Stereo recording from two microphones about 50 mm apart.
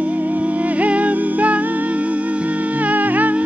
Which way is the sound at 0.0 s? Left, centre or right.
Right.